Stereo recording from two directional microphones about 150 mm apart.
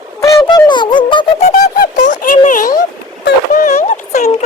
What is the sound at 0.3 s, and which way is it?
Music, 35° left (ahead or behind).